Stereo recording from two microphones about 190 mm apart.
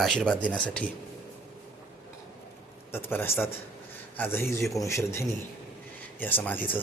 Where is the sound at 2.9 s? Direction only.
10° left (ahead or behind).